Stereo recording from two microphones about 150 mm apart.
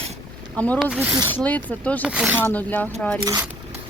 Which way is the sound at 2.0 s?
10° right (ahead or behind).